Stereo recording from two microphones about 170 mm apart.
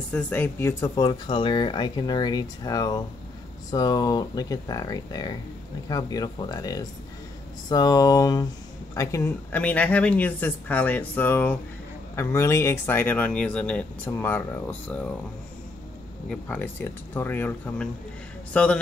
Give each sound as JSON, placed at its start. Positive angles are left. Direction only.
{"t": 0.1, "sound": "speech", "side_deg": 10}
{"t": 16.3, "sound": "a man's voice", "side_deg": 10}